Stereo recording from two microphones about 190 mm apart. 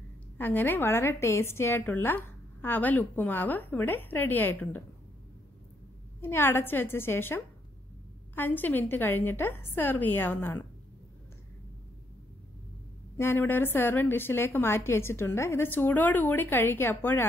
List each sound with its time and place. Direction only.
0.4 s a woman's voice: 10° left (ahead or behind)
6.2 s a woman's voice: 10° left (ahead or behind)
13.2 s a woman's voice: 10° left (ahead or behind)